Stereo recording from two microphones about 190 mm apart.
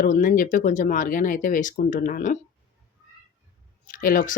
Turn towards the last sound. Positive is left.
turn(degrees=45)  # may be behind; listen again after turning